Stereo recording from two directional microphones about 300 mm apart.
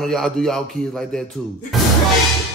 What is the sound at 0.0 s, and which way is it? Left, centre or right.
A man's voice, centre.